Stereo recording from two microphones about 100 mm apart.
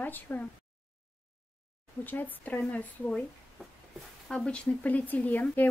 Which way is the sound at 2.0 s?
20° left (ahead or behind).